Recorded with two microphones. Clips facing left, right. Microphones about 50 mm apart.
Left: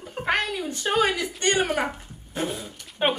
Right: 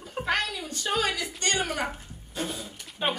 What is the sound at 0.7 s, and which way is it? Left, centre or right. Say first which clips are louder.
Speech: left 7 dB; left.